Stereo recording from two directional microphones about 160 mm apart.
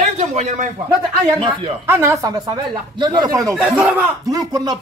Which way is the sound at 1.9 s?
15° right (ahead or behind).